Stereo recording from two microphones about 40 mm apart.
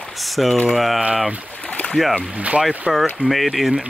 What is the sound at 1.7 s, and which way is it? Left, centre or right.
Boat, left.